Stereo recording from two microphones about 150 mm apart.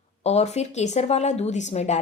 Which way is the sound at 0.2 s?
45° left (ahead or behind).